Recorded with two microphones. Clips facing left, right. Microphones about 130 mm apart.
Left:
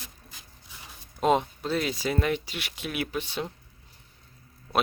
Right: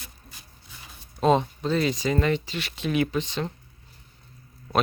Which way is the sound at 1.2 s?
10° left (ahead or behind).